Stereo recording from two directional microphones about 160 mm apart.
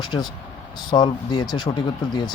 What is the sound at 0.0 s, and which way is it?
Speech, 25° left (ahead or behind).